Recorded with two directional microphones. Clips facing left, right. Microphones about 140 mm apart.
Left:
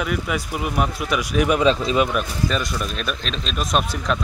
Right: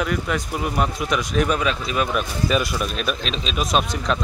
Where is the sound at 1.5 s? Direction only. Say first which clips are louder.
Left 5 dB; 25° left (ahead or behind).